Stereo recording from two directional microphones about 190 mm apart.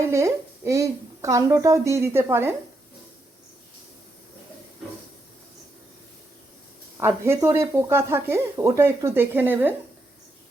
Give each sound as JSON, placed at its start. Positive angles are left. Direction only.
{"t": 0.0, "sound": "speech", "side_deg": -15}
{"t": 7.0, "sound": "speech", "side_deg": -15}